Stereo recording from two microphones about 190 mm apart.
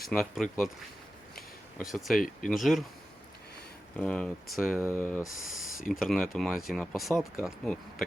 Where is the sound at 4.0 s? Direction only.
5° left (ahead or behind).